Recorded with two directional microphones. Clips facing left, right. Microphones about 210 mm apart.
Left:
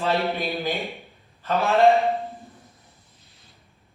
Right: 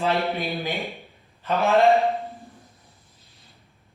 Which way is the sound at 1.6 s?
Centre (ahead or behind).